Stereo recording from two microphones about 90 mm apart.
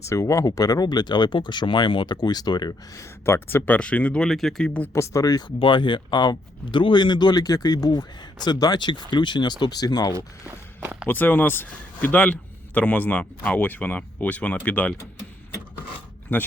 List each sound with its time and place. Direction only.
0.1 s speech: 35° left (ahead or behind)
2.9 s speech: 30° left (ahead or behind)
3.8 s speech: 15° left (ahead or behind)
4.9 s speech: 40° left (ahead or behind)
5.5 s speech: 65° left (ahead or behind); by 10.2 s 45° left (ahead or behind)
10.2 s speech: 25° right (ahead or behind)
11.1 s speech: 20° left (ahead or behind)